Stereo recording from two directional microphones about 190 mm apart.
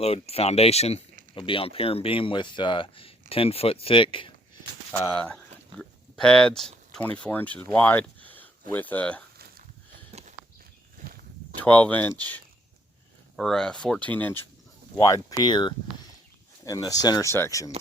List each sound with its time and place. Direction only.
0.0 s speech: 30° left (ahead or behind)
4.9 s speech: 5° left (ahead or behind)
10.1 s a sound: 35° right (ahead or behind)
10.9 s walk: 50° right (ahead or behind)
11.6 s speech: 10° left (ahead or behind)